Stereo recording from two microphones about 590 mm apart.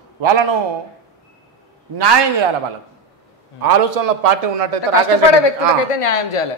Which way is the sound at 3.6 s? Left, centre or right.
Right.